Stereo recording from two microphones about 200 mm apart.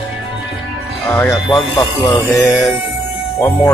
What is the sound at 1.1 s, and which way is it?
Speech, 15° left (ahead or behind).